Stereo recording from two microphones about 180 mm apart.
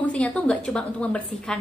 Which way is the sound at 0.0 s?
5° left (ahead or behind).